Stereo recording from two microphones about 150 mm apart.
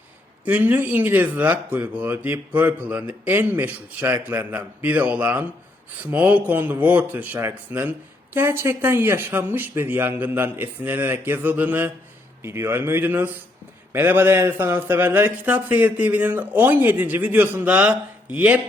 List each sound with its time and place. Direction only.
0.4 s speech: 10° right (ahead or behind)